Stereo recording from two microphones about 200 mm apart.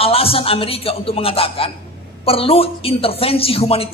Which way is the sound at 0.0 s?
30° left (ahead or behind).